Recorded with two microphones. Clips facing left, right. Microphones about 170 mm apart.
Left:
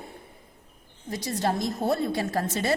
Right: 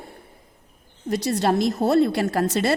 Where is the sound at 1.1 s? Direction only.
75° right (ahead or behind).